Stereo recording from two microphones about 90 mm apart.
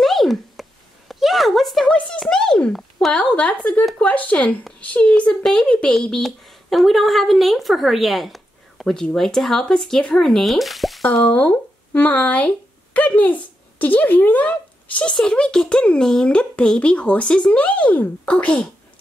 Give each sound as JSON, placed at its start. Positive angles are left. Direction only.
{"t": 0.0, "sound": "a sound", "side_deg": 0}
{"t": 3.2, "sound": "a woman's voice", "side_deg": 15}
{"t": 11.2, "sound": "speech", "side_deg": 20}